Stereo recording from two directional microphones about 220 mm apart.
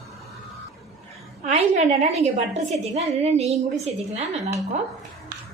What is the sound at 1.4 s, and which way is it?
A woman's voice, 30° right (ahead or behind).